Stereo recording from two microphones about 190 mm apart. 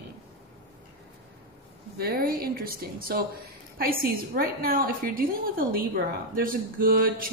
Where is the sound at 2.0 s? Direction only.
55° right (ahead or behind).